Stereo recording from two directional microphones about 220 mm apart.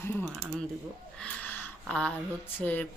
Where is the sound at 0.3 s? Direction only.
5° right (ahead or behind).